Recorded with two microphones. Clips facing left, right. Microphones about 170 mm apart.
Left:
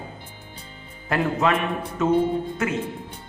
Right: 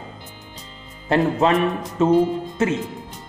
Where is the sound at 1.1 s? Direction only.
30° right (ahead or behind).